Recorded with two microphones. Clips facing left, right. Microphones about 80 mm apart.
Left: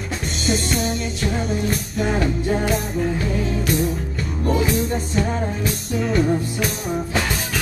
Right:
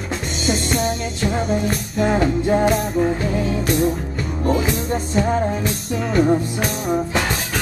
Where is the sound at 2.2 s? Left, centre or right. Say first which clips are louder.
Right 5 dB; right.